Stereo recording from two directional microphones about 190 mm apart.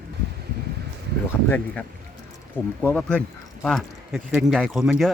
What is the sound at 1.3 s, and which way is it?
Speech, 5° left (ahead or behind).